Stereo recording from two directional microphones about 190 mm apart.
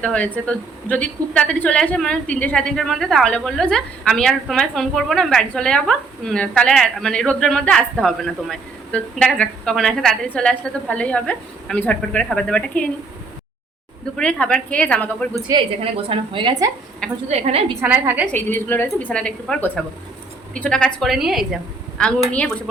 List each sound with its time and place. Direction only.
0.0 s a woman's voice: 5° left (ahead or behind)
14.2 s a woman's voice: 5° left (ahead or behind)
15.4 s a woman's voice: 25° right (ahead or behind)
17.2 s a woman's voice: 35° right (ahead or behind)
17.7 s a woman's voice: 10° right (ahead or behind)
18.3 s a woman's voice: 10° left (ahead or behind)